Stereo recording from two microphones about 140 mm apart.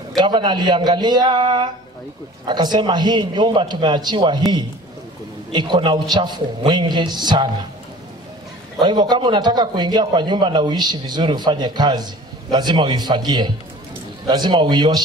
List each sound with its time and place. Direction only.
0.2 s a man's voice: 30° right (ahead or behind)
5.5 s a man's voice: 35° right (ahead or behind)
8.8 s a man's voice: 30° right (ahead or behind)